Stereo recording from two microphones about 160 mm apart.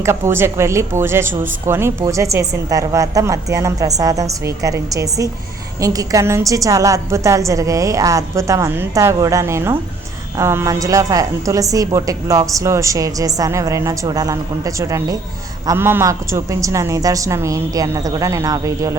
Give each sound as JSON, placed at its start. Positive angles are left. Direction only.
{"t": 0.0, "sound": "a woman's voice", "side_deg": -15}